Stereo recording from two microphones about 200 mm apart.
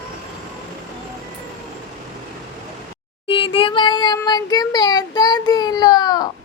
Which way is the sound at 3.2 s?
25° left (ahead or behind).